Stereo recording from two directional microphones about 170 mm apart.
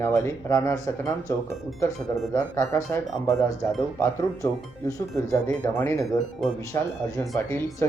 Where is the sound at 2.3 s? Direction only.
15° left (ahead or behind).